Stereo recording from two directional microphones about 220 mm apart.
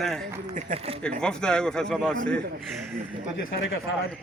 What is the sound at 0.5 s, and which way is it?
Speech, 30° right (ahead or behind).